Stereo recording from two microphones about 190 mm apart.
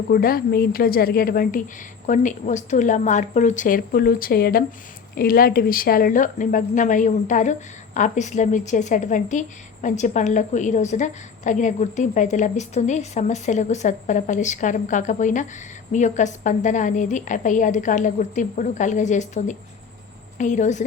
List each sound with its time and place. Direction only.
0.1 s a woman's voice: 50° left (ahead or behind)